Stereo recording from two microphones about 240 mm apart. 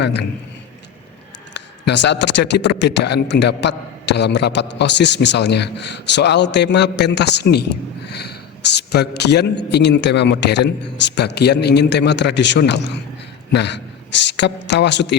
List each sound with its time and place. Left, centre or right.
0.0 s speech: left
1.5 s speech: left